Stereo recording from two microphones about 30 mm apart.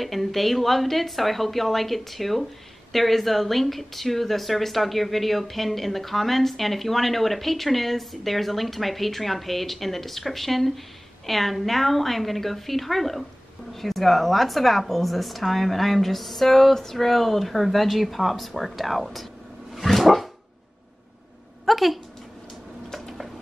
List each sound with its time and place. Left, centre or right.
0.0 s a woman's voice: centre
19.7 s dog: centre
21.6 s speech: centre
22.8 s tick-tock: centre